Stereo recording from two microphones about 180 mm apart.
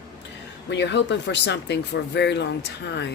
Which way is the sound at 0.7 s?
75° left (ahead or behind).